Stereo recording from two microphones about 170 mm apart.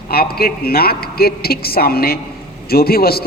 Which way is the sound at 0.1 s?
65° left (ahead or behind).